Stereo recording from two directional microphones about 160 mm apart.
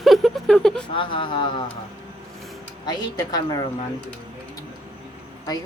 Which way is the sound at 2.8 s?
25° left (ahead or behind).